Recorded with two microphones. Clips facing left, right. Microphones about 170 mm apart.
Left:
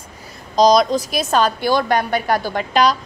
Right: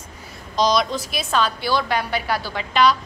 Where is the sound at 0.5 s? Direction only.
40° left (ahead or behind).